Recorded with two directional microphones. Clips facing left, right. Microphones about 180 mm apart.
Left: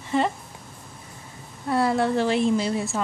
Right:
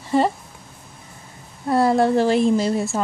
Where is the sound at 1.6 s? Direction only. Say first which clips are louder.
Right 5 dB; 40° right (ahead or behind).